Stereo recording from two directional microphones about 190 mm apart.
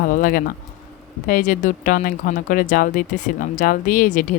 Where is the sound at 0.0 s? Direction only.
45° left (ahead or behind).